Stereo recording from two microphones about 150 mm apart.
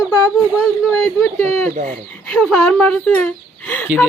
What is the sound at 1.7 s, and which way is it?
Speech, 60° right (ahead or behind).